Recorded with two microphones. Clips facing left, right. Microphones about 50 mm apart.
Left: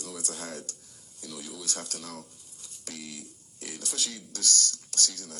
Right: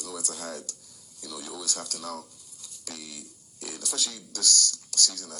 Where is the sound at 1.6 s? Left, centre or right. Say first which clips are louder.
Right 3 dB; left.